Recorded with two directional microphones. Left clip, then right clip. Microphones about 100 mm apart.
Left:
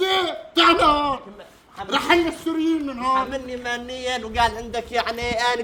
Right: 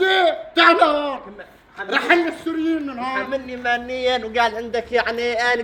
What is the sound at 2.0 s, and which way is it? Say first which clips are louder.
A man's voice: right 2 dB; 30° left (ahead or behind).